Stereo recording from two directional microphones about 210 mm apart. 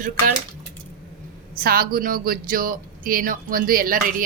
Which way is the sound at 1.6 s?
45° right (ahead or behind).